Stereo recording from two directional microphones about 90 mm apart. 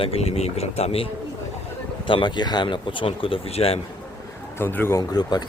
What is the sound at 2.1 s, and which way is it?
Speech, 60° left (ahead or behind).